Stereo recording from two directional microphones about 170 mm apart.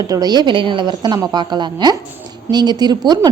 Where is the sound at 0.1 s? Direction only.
25° right (ahead or behind).